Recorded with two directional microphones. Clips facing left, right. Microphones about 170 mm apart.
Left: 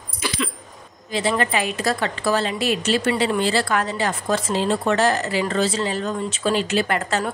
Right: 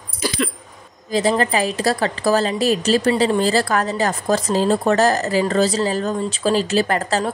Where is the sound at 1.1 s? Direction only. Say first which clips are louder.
Right 4 dB; 40° right (ahead or behind).